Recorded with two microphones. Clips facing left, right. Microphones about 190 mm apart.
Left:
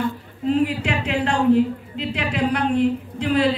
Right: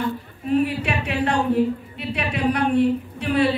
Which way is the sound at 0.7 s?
90° left.